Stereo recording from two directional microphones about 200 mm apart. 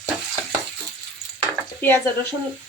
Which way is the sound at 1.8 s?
10° left (ahead or behind).